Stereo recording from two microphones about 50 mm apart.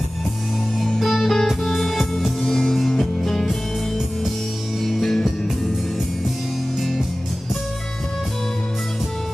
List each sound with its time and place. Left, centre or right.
0.8 s music: centre
4.8 s music: centre